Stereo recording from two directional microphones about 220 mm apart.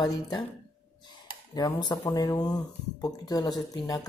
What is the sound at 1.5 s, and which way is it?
A woman's voice, 20° left (ahead or behind).